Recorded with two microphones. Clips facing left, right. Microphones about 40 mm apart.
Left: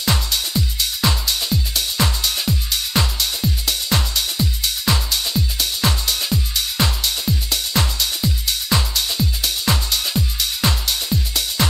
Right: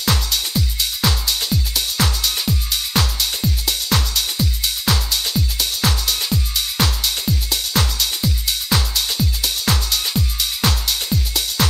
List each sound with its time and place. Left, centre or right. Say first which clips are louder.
0.0 s music: even; centre